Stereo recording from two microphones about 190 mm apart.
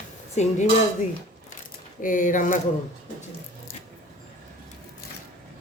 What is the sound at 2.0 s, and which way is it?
Speech, 45° left (ahead or behind).